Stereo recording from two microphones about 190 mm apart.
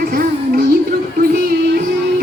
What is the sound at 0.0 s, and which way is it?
Music, 50° right (ahead or behind).